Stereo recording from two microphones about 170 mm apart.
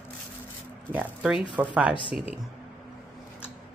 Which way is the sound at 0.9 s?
5° right (ahead or behind).